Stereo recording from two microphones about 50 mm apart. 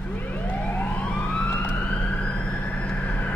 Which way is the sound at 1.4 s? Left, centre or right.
Left.